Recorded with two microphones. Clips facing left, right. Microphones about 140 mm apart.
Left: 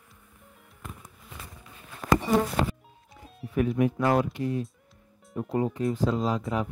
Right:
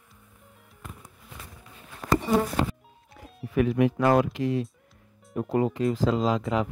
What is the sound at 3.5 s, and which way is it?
Speech, 90° right.